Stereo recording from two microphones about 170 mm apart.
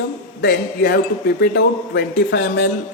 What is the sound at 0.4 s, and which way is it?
Speech, 65° left (ahead or behind).